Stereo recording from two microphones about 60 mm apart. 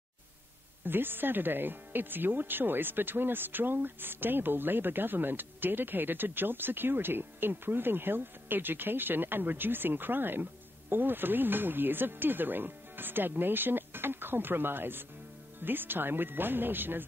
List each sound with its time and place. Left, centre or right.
0.8 s speech: right